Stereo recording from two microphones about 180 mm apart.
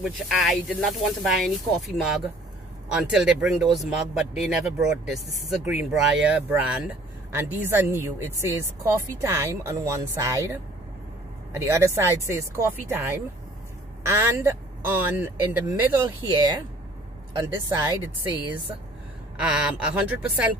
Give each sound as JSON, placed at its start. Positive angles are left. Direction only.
{"t": 0.0, "sound": "speech", "side_deg": 0}
{"t": 17.4, "sound": "speech", "side_deg": -15}